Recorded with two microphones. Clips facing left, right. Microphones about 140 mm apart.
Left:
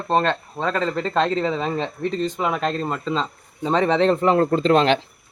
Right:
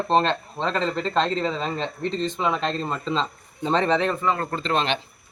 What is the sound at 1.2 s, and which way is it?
Speech, 15° left (ahead or behind).